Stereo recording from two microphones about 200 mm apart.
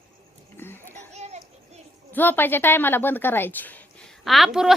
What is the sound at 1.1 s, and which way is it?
Children playing, 35° right (ahead or behind).